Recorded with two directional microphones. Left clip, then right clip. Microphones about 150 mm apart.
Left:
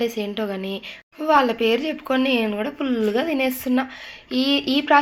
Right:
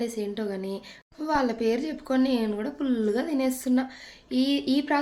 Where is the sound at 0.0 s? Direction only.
Centre (ahead or behind).